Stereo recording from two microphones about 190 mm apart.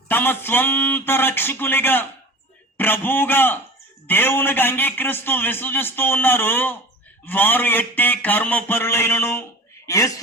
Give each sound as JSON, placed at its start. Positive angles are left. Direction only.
{"t": 0.1, "sound": "a man's voice", "side_deg": 10}